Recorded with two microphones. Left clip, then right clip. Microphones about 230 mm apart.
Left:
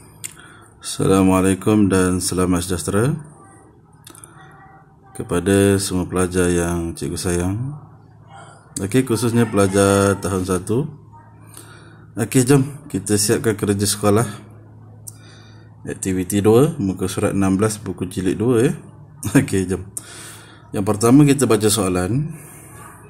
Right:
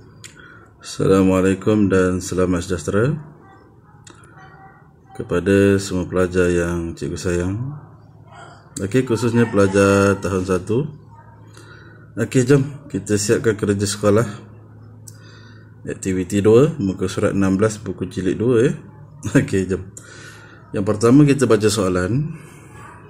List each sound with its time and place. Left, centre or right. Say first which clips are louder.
0.2 s speech: left 3 dB; centre
5.1 s speech: right 1 dB; centre
8.7 s speech: even; centre
12.2 s speech: even; centre
15.8 s speech: even; centre